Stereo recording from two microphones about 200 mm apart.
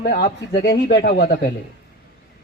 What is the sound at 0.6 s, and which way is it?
Speech, 55° left (ahead or behind).